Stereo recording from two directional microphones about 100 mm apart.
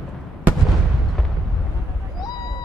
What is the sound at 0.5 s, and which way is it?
Fireworks, 15° right (ahead or behind).